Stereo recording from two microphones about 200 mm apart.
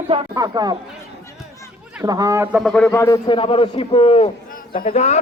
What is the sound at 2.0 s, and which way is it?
Speech, 15° right (ahead or behind).